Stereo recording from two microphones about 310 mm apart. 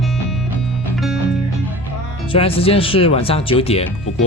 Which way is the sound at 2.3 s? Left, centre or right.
Centre.